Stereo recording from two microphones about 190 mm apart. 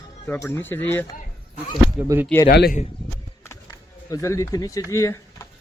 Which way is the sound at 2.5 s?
55° left (ahead or behind).